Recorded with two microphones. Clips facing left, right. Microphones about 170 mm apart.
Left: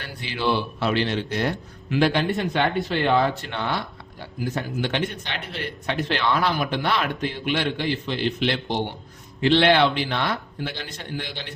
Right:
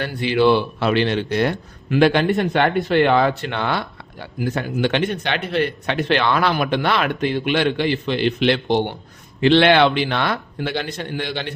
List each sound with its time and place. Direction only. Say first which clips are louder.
0.0 s speech: right 10 dB; 65° right (ahead or behind)